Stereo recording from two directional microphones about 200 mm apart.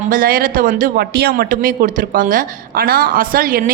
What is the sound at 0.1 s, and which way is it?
Speech, 45° right (ahead or behind).